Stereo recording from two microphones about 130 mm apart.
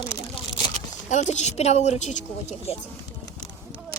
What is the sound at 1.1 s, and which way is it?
A child's voice, 60° left (ahead or behind).